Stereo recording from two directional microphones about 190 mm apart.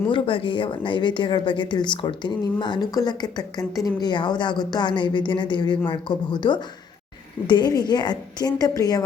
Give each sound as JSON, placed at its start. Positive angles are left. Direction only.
{"t": 0.1, "sound": "a woman's voice", "side_deg": 25}